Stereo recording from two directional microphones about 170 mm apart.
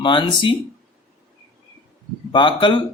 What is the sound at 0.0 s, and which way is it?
Speech, 30° left (ahead or behind).